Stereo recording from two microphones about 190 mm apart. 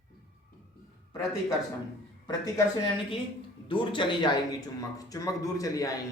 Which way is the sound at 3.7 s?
25° left (ahead or behind).